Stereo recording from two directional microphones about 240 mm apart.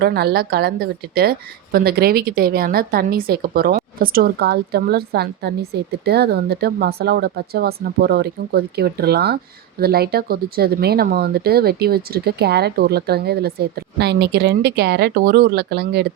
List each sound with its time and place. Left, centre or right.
0.0 s speech: right